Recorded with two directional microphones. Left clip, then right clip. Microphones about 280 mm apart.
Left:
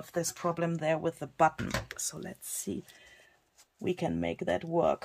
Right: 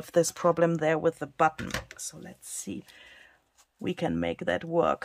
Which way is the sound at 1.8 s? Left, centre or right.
Centre.